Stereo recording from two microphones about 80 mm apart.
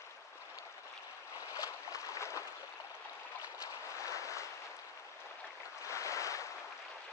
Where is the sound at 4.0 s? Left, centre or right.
Left.